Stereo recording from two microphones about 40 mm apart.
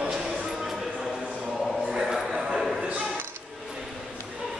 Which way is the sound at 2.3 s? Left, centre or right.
Centre.